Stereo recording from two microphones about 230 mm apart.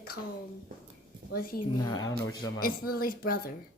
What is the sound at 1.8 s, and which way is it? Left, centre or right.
Speech, centre.